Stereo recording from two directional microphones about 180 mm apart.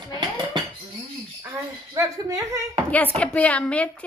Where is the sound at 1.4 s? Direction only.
15° right (ahead or behind).